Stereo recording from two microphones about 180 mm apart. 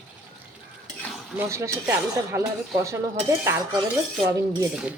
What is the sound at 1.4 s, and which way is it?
Speech, 15° right (ahead or behind).